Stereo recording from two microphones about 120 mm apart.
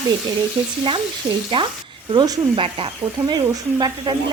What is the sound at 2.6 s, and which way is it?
Dishes, 45° right (ahead or behind).